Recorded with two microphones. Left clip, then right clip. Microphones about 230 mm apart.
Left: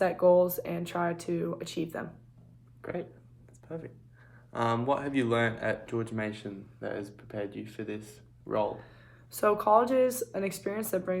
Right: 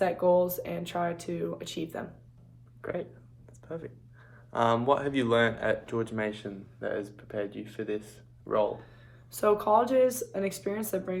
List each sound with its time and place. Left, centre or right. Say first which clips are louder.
0.0 s speech: left 1 dB; left
2.8 s speech: right 2 dB; centre
9.3 s speech: even; left